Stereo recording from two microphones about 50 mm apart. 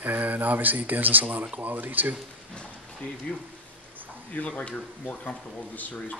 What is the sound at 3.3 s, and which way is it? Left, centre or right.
Speech, left.